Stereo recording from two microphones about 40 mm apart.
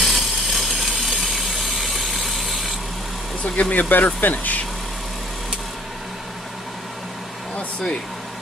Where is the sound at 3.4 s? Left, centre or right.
Left.